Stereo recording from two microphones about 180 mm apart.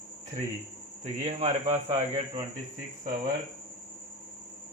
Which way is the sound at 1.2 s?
40° right (ahead or behind).